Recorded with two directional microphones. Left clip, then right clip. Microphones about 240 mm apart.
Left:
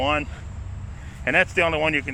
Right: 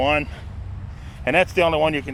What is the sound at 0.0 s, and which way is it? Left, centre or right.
Speech, right.